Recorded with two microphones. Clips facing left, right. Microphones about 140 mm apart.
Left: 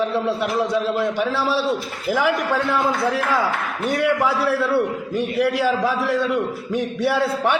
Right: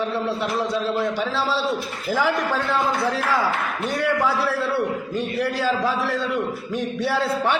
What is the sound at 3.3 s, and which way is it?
Speech, 20° left (ahead or behind).